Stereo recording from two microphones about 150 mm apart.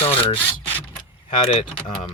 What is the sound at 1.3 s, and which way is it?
Speech, 60° left (ahead or behind).